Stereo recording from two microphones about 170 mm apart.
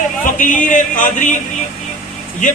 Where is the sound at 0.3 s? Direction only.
50° left (ahead or behind).